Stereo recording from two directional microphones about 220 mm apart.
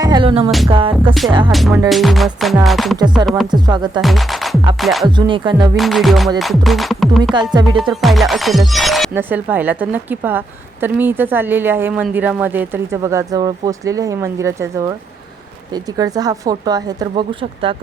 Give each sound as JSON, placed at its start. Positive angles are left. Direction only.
{"t": 0.0, "sound": "music", "side_deg": -20}
{"t": 0.7, "sound": "speech", "side_deg": -25}
{"t": 1.9, "sound": "speech", "side_deg": 0}
{"t": 3.2, "sound": "speech", "side_deg": -20}
{"t": 4.0, "sound": "speech", "side_deg": 0}
{"t": 5.0, "sound": "speech", "side_deg": -20}
{"t": 5.7, "sound": "speech", "side_deg": 0}